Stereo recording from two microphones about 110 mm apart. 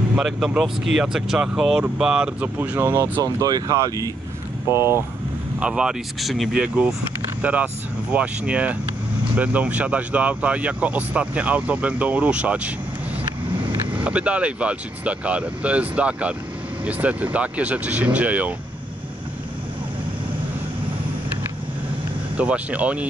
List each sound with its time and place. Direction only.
0.1 s speech: 10° right (ahead or behind)
3.2 s speech: 35° right (ahead or behind)
4.7 s speech: 20° right (ahead or behind)
5.6 s speech: 10° right (ahead or behind)
7.4 s speech: 15° right (ahead or behind)
22.4 s speech: 10° right (ahead or behind)